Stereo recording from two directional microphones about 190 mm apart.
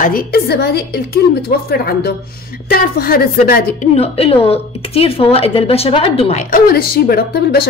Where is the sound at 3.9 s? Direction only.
30° left (ahead or behind).